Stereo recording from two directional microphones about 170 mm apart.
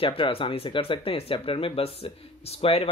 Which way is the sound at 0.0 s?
30° left (ahead or behind).